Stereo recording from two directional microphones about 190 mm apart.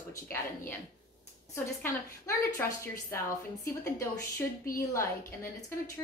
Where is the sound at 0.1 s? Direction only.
15° left (ahead or behind).